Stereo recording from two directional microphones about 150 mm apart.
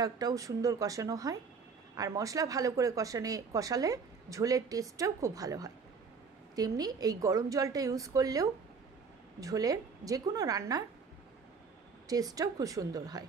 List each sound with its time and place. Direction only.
0.0 s speech: 25° right (ahead or behind)
12.1 s speech: 25° right (ahead or behind)